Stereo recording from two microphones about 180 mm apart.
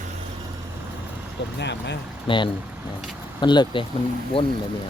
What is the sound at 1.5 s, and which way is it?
Speech, 75° left (ahead or behind).